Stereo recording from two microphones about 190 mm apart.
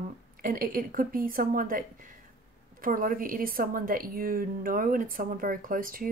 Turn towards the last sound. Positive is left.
turn(degrees=-45)  # may be behind; listen again after turning